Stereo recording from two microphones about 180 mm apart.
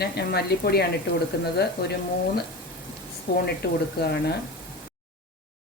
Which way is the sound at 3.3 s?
60° left (ahead or behind).